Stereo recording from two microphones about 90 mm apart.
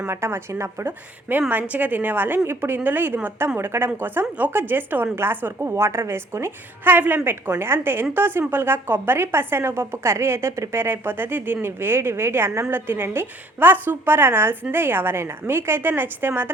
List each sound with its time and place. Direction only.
0.0 s a woman's voice: 25° right (ahead or behind)